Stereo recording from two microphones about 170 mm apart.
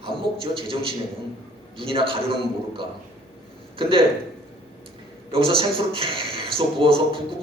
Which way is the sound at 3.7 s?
30° right (ahead or behind).